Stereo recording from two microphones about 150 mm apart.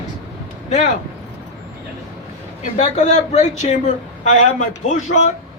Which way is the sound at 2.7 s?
50° left (ahead or behind).